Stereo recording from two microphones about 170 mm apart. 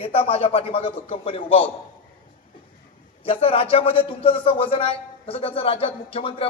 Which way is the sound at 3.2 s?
35° left (ahead or behind).